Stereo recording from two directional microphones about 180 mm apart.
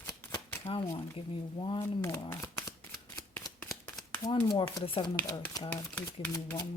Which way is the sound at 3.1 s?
15° left (ahead or behind).